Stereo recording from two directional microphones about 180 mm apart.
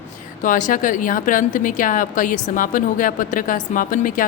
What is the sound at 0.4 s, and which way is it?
A woman's voice, 45° left (ahead or behind).